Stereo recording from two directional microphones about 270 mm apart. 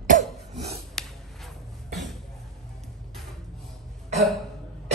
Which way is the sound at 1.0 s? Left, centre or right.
Centre.